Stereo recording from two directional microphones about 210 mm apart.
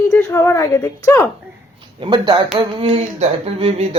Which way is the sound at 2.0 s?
20° right (ahead or behind).